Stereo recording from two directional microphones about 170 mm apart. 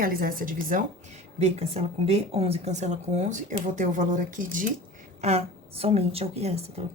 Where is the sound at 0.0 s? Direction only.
60° right (ahead or behind).